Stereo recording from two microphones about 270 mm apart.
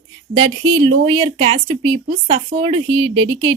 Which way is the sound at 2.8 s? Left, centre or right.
Right.